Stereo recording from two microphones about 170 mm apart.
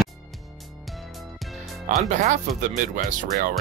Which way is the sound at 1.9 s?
45° right (ahead or behind).